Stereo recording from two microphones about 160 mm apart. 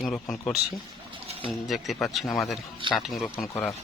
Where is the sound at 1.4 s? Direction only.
Centre (ahead or behind).